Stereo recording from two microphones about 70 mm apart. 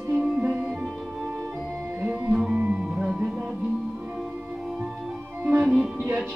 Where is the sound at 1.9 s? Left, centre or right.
Right.